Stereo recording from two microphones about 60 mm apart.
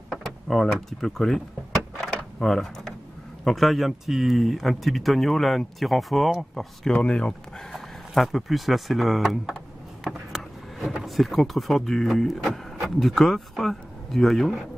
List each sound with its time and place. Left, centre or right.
0.1 s speech: centre
2.4 s speech: centre
6.9 s speech: centre
7.7 s speech: centre
10.0 s a sound: centre
11.1 s speech: centre